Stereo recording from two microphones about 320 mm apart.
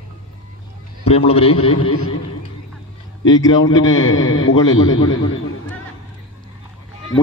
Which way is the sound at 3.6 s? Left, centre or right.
Left.